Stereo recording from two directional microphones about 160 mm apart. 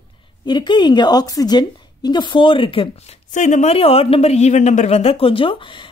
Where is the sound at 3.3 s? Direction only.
50° left (ahead or behind).